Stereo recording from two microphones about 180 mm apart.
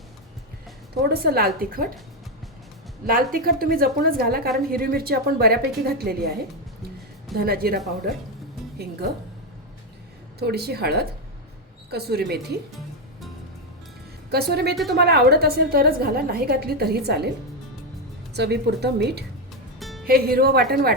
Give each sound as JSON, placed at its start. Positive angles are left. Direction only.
{"t": 1.0, "sound": "a woman's voice", "side_deg": -60}
{"t": 3.1, "sound": "a woman's voice", "side_deg": -55}
{"t": 7.3, "sound": "a woman's voice", "side_deg": -55}
{"t": 10.4, "sound": "a woman's voice", "side_deg": -65}
{"t": 14.3, "sound": "a woman's voice", "side_deg": -60}
{"t": 18.3, "sound": "a woman's voice", "side_deg": -65}